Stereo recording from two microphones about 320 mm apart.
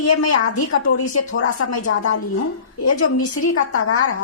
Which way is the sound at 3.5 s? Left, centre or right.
Left.